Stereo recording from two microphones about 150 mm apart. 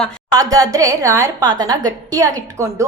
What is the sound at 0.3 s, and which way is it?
A woman's voice, 25° right (ahead or behind).